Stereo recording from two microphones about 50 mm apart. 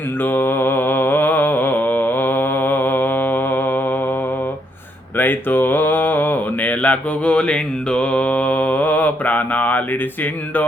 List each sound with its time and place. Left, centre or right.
0.2 s mantra: left
5.1 s mantra: left